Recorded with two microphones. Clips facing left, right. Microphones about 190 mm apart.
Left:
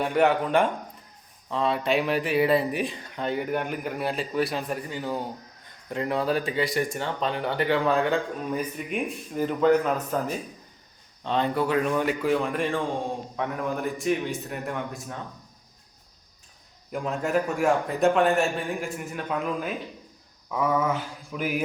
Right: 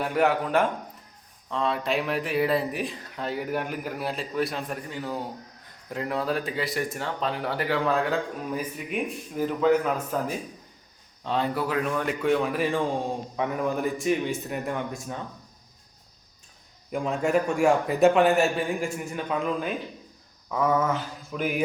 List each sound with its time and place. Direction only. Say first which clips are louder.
0.0 s speech: left 2 dB; centre (ahead or behind)
16.9 s speech: right 2 dB; centre (ahead or behind)
20.5 s mantra: right 1 dB; 10° left (ahead or behind)